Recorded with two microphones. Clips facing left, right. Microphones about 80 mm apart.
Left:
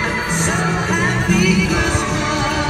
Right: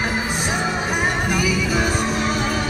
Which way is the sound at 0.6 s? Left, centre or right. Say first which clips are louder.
Left 3 dB; centre.